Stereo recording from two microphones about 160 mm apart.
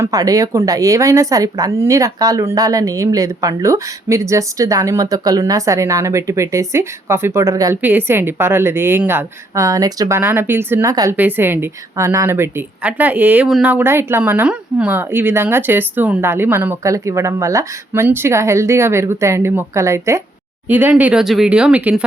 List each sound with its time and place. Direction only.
0.0 s a woman's voice: 20° right (ahead or behind)